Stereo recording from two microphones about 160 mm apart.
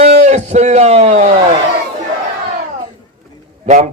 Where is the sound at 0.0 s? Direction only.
45° right (ahead or behind).